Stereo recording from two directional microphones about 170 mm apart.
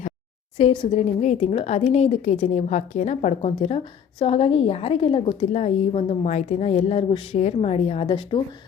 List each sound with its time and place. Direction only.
0.5 s a woman's voice: 30° left (ahead or behind)